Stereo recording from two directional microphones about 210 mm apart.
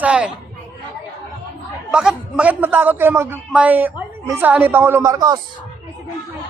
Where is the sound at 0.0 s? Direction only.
5° right (ahead or behind).